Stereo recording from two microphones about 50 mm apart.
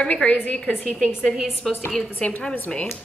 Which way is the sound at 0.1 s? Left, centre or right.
Left.